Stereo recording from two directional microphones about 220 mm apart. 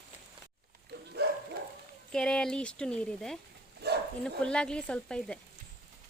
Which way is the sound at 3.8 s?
50° right (ahead or behind).